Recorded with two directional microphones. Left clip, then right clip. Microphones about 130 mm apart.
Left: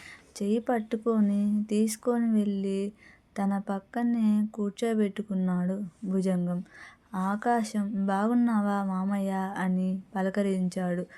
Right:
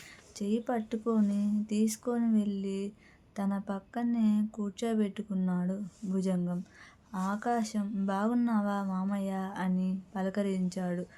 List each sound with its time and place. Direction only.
0.3 s speech: 40° left (ahead or behind)